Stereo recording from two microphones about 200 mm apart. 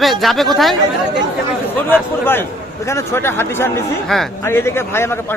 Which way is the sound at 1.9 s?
10° left (ahead or behind).